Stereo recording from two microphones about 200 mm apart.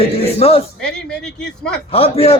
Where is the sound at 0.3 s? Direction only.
30° left (ahead or behind).